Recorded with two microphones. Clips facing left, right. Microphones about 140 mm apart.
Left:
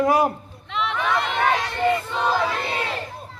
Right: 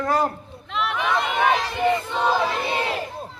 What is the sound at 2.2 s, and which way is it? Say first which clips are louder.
Choir: right 1 dB; 20° right (ahead or behind).